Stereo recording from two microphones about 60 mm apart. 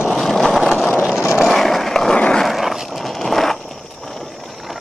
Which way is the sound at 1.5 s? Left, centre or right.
Centre.